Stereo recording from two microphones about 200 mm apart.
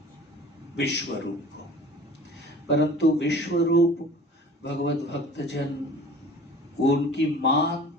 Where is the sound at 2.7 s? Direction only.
60° left (ahead or behind).